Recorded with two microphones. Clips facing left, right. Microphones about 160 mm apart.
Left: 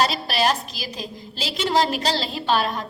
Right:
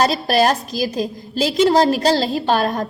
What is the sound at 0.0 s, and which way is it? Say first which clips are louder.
A woman's voice: right 6 dB; 45° right (ahead or behind).